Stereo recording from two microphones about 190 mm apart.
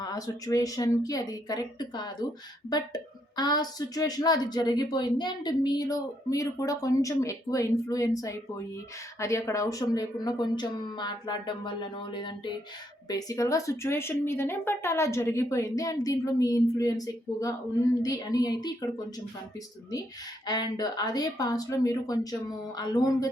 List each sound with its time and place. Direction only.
0.0 s a woman's voice: 20° left (ahead or behind)
20.5 s a woman's voice: 20° left (ahead or behind)